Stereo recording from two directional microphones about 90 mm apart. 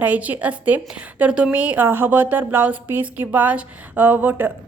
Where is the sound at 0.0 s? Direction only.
20° right (ahead or behind).